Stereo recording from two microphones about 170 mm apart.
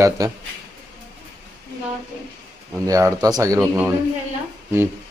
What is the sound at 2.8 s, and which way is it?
Speech, 20° right (ahead or behind).